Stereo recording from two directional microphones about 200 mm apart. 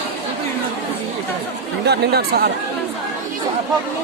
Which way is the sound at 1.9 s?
50° right (ahead or behind).